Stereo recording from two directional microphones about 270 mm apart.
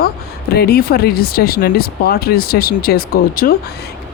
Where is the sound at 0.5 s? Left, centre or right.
Left.